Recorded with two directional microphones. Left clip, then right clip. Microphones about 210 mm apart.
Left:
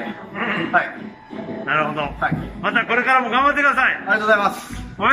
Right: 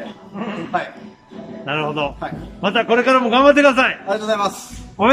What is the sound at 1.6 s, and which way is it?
A man's voice, 50° right (ahead or behind).